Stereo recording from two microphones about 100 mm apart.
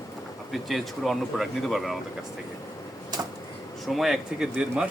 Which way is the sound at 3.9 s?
Centre (ahead or behind).